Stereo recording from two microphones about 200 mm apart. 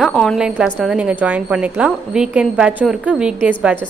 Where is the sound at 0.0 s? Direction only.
5° left (ahead or behind).